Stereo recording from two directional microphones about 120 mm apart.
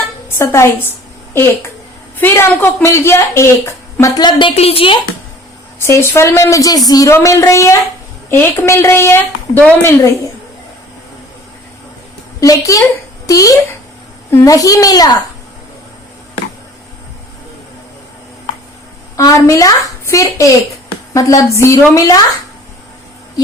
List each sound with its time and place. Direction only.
0.3 s a woman's voice: 20° left (ahead or behind)
2.1 s a woman's voice: 20° left (ahead or behind)
4.2 s a woman's voice: 40° left (ahead or behind)
4.5 s a woman's voice: 55° left (ahead or behind)
5.8 s a woman's voice: 20° left (ahead or behind)
12.4 s a woman's voice: 30° left (ahead or behind)
19.1 s a woman's voice: 25° left (ahead or behind)